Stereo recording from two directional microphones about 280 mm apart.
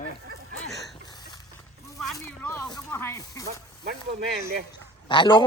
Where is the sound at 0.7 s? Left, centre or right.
Centre.